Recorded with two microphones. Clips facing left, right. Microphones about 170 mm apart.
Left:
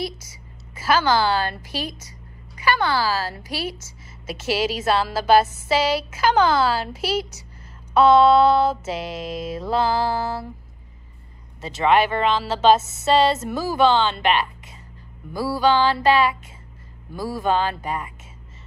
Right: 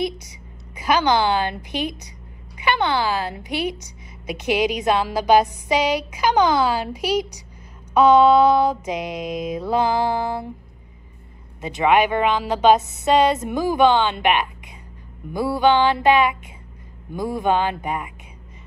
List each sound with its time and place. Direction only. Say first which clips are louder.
0.0 s a woman's voice: right 4 dB; 20° right (ahead or behind)
11.6 s a woman's voice: right 1 dB; 15° right (ahead or behind)